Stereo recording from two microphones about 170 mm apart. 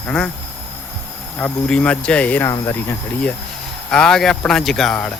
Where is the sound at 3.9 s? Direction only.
5° left (ahead or behind).